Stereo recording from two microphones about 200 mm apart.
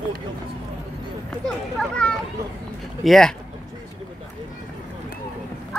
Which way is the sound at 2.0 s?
5° left (ahead or behind).